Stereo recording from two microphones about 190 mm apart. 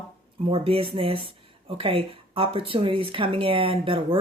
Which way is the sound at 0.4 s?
30° right (ahead or behind).